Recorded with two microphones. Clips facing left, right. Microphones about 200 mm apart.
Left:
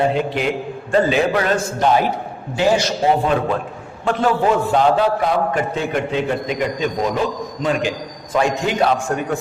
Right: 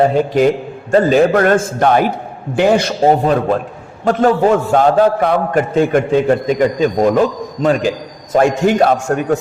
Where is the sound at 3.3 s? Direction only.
40° right (ahead or behind).